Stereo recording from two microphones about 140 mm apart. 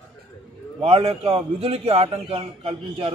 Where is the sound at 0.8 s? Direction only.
45° right (ahead or behind).